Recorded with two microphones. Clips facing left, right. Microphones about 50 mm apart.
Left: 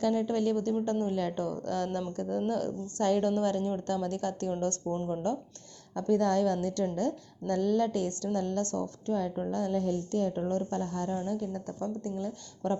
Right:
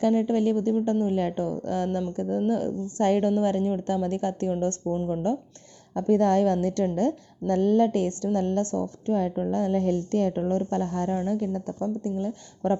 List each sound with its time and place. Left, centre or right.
0.0 s a woman's voice: right
0.3 s speech: right
3.0 s a woman's voice: right
3.2 s a woman's voice: centre